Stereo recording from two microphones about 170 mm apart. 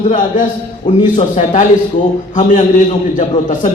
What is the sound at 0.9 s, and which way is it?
A man's voice, 45° left (ahead or behind).